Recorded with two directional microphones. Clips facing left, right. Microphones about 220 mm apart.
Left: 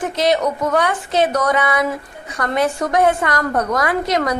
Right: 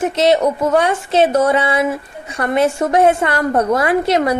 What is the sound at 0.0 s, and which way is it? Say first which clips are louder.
A woman's voice: right 4 dB; 25° right (ahead or behind).